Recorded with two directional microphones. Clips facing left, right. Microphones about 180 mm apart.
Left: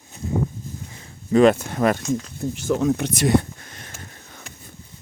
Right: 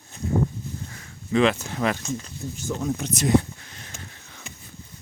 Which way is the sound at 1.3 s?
45° left (ahead or behind).